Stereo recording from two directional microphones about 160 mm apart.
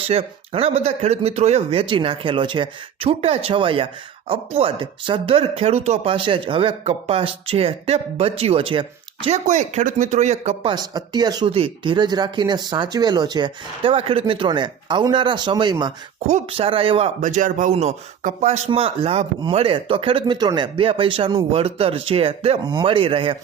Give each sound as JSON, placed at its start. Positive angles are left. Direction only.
{"t": 0.1, "sound": "speech", "side_deg": -40}
{"t": 9.5, "sound": "speech", "side_deg": -50}
{"t": 10.7, "sound": "speech", "side_deg": -25}
{"t": 17.2, "sound": "speech", "side_deg": -55}